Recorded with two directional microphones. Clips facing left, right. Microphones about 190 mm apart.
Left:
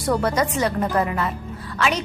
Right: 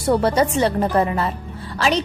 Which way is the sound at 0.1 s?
30° right (ahead or behind).